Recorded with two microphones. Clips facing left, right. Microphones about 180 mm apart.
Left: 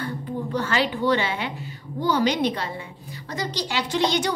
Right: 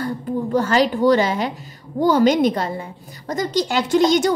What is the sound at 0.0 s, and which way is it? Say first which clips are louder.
A woman's voice: right 6 dB; 40° right (ahead or behind).